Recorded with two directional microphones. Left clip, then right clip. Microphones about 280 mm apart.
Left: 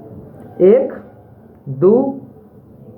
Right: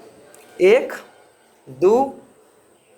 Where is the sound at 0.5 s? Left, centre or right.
Right.